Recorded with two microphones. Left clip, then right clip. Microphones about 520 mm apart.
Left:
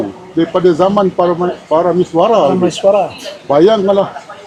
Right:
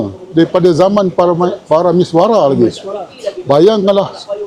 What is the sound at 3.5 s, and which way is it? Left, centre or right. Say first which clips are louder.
Speech: even; right.